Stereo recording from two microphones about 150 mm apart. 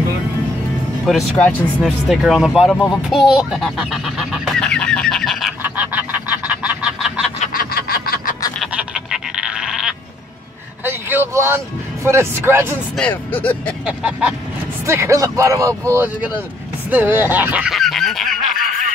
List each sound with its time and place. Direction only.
1.0 s speech: 5° left (ahead or behind)
5.6 s frog: 10° right (ahead or behind)
7.5 s snicker: 85° left
8.7 s goat: 5° right (ahead or behind)
10.8 s speech: 15° right (ahead or behind)
12.9 s speech: 10° left (ahead or behind)
13.8 s speech: 5° right (ahead or behind)
14.9 s speech: 20° right (ahead or behind)
17.7 s goose: centre (ahead or behind)